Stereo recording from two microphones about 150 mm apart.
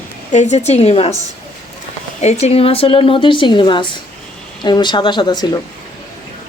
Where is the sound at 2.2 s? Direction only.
45° left (ahead or behind); by 5.5 s 30° left (ahead or behind).